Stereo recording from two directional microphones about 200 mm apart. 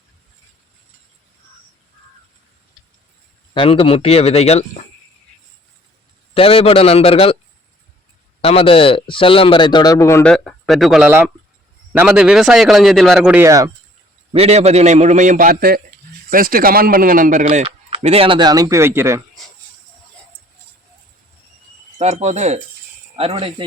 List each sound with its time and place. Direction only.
3.5 s speech: 25° left (ahead or behind)
6.3 s a man's voice: 30° left (ahead or behind)
8.4 s a man's voice: 30° left (ahead or behind); by 10.3 s 15° left (ahead or behind)
10.3 s speech: centre (ahead or behind); by 13.7 s 15° right (ahead or behind)
14.3 s a man's voice: 30° right (ahead or behind); by 19.2 s 15° right (ahead or behind)
21.9 s a man's voice: 35° right (ahead or behind)